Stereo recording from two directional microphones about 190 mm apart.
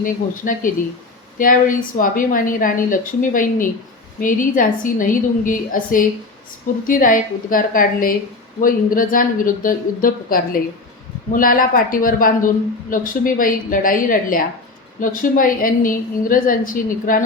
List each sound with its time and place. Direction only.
0.0 s a woman's voice: 45° left (ahead or behind)